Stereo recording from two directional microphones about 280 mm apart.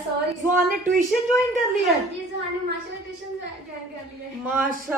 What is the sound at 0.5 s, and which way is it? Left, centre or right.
Speech, right.